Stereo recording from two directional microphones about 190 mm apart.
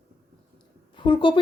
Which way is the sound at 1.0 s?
25° left (ahead or behind).